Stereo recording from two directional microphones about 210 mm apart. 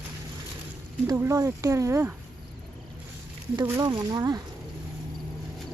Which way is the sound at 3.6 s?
15° right (ahead or behind).